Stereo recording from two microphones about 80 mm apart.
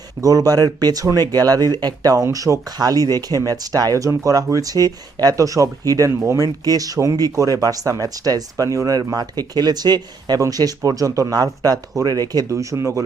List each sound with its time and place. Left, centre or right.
0.2 s speech: right
10.4 s speech: right
12.5 s speech: right